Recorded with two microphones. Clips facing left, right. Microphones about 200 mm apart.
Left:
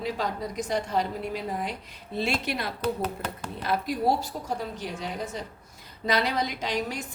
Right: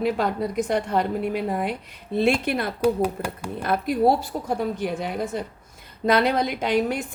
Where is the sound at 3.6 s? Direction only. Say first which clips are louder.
Right 5 dB; 55° right (ahead or behind).